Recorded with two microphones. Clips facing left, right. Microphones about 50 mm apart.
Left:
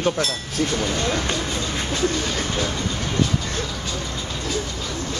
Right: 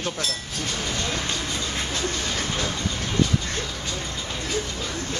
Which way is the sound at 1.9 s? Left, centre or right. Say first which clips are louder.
Left 7 dB; centre.